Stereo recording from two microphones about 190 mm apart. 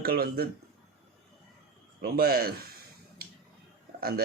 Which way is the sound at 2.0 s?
55° right (ahead or behind).